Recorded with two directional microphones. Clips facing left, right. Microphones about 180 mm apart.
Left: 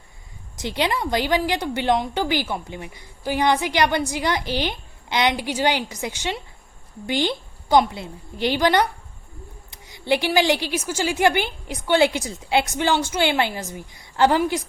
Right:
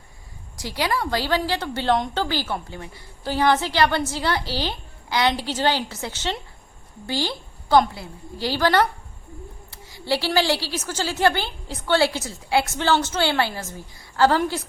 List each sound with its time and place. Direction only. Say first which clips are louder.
0.5 s a woman's voice: left 1 dB; 20° left (ahead or behind)